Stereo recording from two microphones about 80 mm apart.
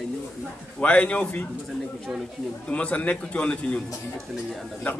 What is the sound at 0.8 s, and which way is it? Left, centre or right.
Speech, centre.